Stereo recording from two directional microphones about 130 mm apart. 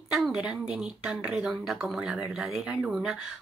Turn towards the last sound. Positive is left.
turn(degrees=-5)  # may be behind; listen again after turning